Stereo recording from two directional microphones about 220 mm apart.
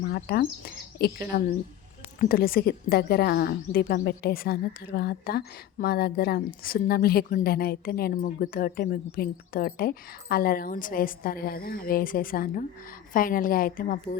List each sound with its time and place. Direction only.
0.1 s a woman's voice: 45° left (ahead or behind)